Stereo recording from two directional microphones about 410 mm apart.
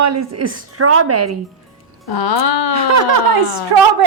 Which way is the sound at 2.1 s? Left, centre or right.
Left.